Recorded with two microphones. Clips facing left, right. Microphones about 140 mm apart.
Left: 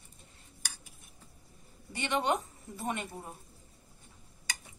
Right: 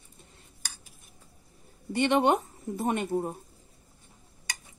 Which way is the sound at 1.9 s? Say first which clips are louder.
Right 8 dB; 55° right (ahead or behind).